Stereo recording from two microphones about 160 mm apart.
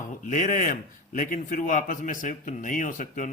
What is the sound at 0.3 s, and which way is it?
A man's voice, 55° left (ahead or behind).